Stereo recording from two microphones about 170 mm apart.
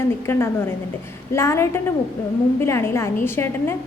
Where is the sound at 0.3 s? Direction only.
15° left (ahead or behind).